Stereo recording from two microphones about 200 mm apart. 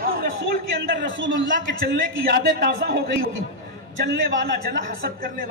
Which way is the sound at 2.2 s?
50° right (ahead or behind).